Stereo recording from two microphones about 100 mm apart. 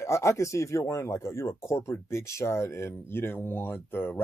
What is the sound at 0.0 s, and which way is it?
Speech, 30° left (ahead or behind).